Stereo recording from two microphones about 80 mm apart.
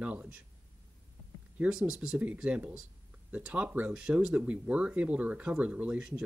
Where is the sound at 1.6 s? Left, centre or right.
Centre.